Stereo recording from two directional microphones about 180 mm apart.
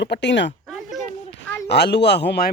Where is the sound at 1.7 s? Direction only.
65° left (ahead or behind).